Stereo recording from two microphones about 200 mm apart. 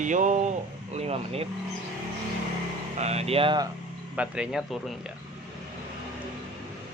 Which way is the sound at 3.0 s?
30° right (ahead or behind).